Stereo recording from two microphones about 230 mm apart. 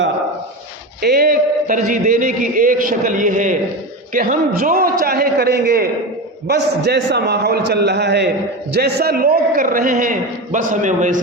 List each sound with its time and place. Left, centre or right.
1.0 s a man's voice: right